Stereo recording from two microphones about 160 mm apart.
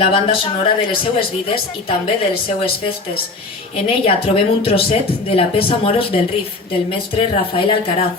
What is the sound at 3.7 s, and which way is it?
Speech, 35° left (ahead or behind).